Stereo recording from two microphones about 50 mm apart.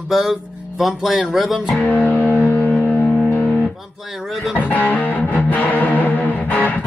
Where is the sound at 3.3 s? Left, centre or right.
Left.